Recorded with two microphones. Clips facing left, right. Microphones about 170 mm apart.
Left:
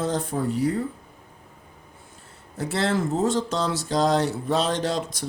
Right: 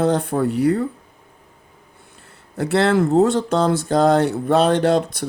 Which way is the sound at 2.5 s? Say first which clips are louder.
Right 8 dB; 65° right (ahead or behind).